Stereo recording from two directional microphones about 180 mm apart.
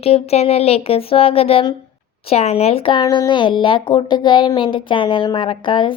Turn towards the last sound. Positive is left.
turn(degrees=30)  # may be behind; listen again after turning